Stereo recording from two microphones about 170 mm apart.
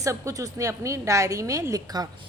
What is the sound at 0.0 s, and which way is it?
A woman's voice, 20° right (ahead or behind).